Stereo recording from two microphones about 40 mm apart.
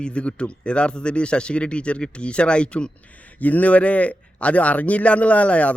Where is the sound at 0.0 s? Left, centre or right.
Left.